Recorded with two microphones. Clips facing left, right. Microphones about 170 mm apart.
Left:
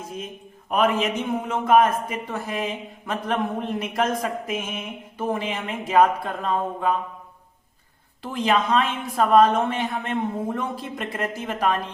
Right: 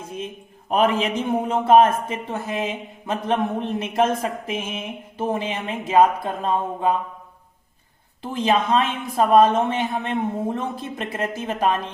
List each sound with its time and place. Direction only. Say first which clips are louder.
0.7 s a man's voice: right 2 dB; 35° right (ahead or behind)
8.2 s a man's voice: right 1 dB; 20° right (ahead or behind)